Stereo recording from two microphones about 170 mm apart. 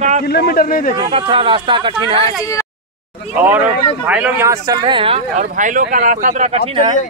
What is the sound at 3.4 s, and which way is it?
Speech, 10° right (ahead or behind).